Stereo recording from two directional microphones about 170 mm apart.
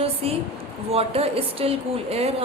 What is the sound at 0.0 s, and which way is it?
A woman's voice, 35° right (ahead or behind).